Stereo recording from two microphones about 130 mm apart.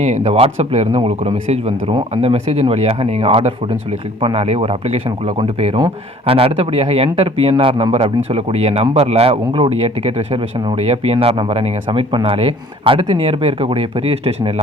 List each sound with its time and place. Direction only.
0.0 s a man's voice: 55° right (ahead or behind)